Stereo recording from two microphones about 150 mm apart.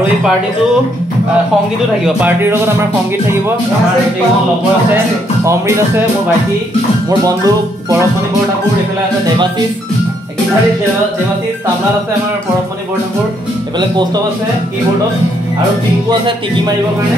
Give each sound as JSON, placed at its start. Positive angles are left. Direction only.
{"t": 2.0, "sound": "a man's voice", "side_deg": -10}
{"t": 4.9, "sound": "speech", "side_deg": -20}
{"t": 7.1, "sound": "speech", "side_deg": -25}
{"t": 16.1, "sound": "speech", "side_deg": -30}